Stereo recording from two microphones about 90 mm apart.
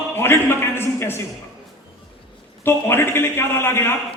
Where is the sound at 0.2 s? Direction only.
25° left (ahead or behind).